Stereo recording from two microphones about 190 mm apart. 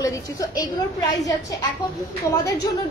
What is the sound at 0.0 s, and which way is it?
Speech, 15° left (ahead or behind).